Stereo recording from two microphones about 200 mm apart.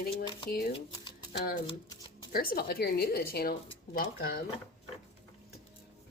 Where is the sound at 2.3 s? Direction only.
50° left (ahead or behind).